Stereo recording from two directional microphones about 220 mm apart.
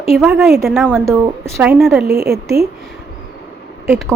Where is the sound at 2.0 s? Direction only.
45° right (ahead or behind).